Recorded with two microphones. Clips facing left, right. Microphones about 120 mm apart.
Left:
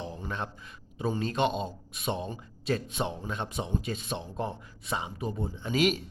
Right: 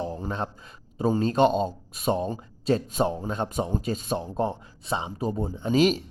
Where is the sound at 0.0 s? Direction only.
35° right (ahead or behind).